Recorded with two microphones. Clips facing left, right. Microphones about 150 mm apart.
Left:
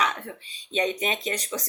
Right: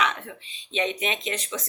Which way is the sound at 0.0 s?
35° left (ahead or behind).